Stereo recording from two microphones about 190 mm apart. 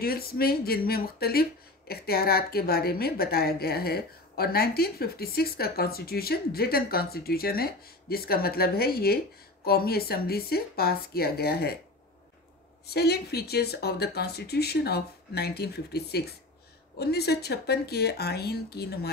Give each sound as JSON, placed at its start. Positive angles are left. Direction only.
{"t": 0.0, "sound": "speech", "side_deg": 50}
{"t": 12.8, "sound": "speech", "side_deg": 60}